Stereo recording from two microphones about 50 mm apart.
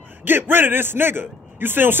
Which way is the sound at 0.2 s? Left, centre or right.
Right.